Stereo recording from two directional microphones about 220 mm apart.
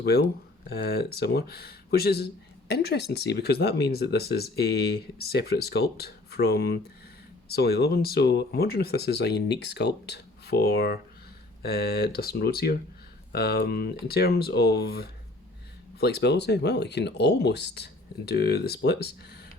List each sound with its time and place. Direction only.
0.0 s speech: 45° left (ahead or behind)